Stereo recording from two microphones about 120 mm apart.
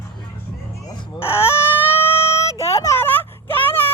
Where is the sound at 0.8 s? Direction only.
40° left (ahead or behind).